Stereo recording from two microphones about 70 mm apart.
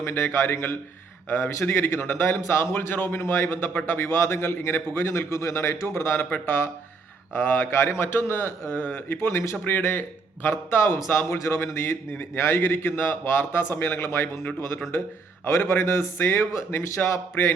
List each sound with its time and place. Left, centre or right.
0.0 s a man's voice: left